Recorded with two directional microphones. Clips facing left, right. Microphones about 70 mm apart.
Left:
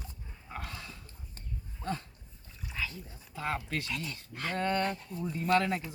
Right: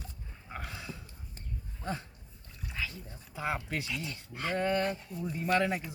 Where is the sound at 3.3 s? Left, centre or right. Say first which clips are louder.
Even; centre.